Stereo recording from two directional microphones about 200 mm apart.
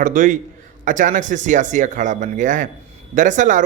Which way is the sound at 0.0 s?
40° right (ahead or behind).